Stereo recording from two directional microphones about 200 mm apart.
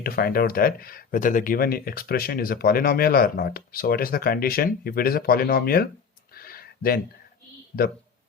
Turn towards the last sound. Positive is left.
turn(degrees=50)  # may be behind; listen again after turning